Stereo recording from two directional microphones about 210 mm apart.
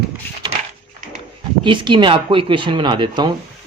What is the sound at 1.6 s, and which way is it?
Speech, 20° right (ahead or behind).